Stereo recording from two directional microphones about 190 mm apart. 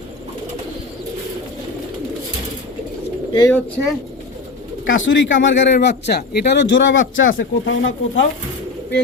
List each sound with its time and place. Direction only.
3.3 s speech: 20° left (ahead or behind)
4.9 s speech: 85° left